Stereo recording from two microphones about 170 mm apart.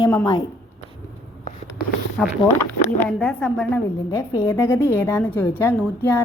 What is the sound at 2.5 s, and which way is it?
A woman's voice, 10° left (ahead or behind).